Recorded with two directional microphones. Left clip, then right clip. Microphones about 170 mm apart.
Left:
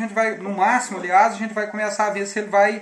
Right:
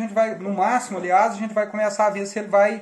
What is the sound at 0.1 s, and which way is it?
Speech, 50° right (ahead or behind).